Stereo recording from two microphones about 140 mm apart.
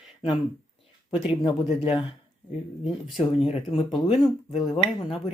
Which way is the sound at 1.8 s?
40° left (ahead or behind).